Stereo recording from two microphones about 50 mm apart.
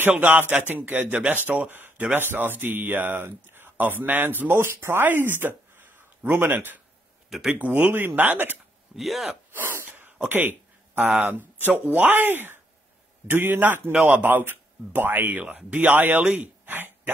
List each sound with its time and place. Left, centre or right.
0.1 s speech: right
3.3 s a sound: right
3.7 s speech: right
4.6 s speech: right
5.3 s a sound: right
7.2 s speech: centre
7.5 s speech: right
7.9 s speech: right
8.9 s speech: centre
9.5 s throat clearing: right
9.8 s a sound: right
11.2 s speech: right